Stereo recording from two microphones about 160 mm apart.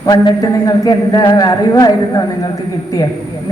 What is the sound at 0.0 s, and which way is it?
A man's voice, 25° left (ahead or behind).